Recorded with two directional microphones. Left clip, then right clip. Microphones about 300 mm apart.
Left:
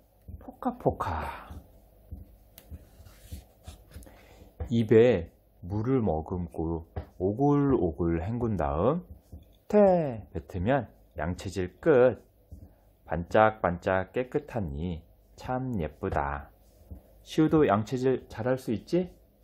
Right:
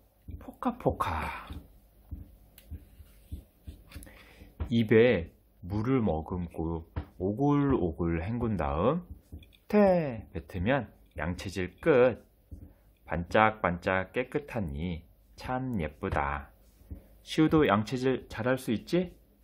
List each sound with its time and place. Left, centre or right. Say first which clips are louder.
0.4 s speech: left 1 dB; centre
4.0 s a sound: even; centre
5.7 s speech: left 1 dB; centre